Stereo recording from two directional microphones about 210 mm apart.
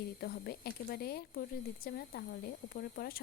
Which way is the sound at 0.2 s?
50° left (ahead or behind).